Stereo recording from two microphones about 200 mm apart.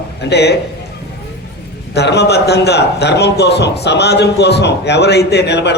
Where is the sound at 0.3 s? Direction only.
55° left (ahead or behind).